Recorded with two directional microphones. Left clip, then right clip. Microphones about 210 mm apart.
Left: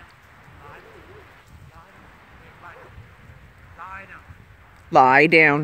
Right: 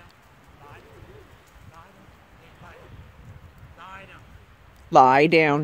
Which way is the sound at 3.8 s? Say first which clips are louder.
Left 5 dB; 60° right (ahead or behind).